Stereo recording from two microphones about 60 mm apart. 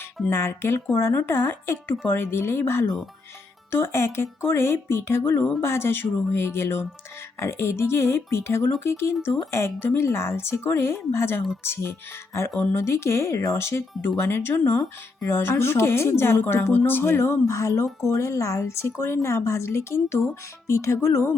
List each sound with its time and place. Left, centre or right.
0.3 s speech: left
16.7 s speech: left